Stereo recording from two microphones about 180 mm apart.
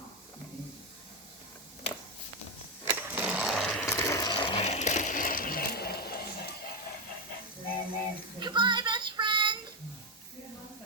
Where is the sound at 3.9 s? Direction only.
15° left (ahead or behind); by 6.4 s 60° left (ahead or behind).